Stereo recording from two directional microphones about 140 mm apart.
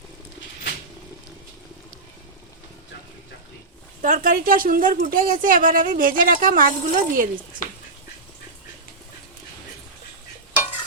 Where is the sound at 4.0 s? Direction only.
70° right (ahead or behind).